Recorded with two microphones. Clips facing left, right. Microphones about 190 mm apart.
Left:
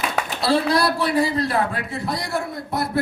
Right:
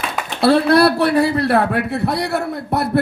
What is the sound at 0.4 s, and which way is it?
A man's voice, 60° right (ahead or behind).